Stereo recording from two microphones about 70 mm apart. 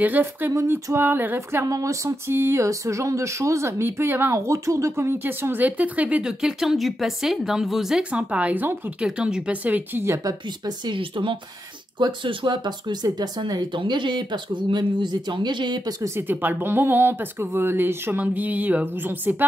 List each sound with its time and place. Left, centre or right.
0.0 s speech: right
0.5 s speech: right
0.9 s speech: right
1.7 s speech: right
2.3 s speech: right
4.3 s speech: right; by 6.2 s centre
6.2 s speech: centre
8.0 s speech: centre
10.2 s speech: right
12.0 s speech: right
16.2 s speech: right